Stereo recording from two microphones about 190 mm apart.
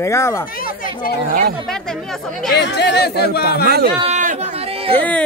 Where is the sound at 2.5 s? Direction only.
65° left (ahead or behind).